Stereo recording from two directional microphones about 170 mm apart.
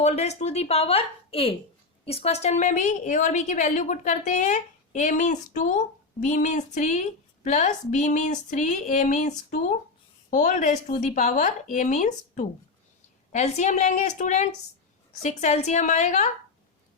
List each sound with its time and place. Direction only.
0.0 s a woman's voice: 40° left (ahead or behind)